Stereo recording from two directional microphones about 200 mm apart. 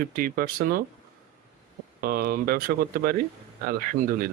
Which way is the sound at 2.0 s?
45° right (ahead or behind).